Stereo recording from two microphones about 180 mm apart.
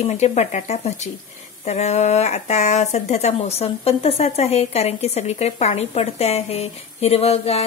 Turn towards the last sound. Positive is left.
turn(degrees=35)  # may be behind; listen again after turning